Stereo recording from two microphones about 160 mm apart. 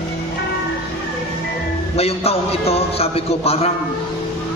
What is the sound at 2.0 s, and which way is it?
A man's voice, 40° left (ahead or behind).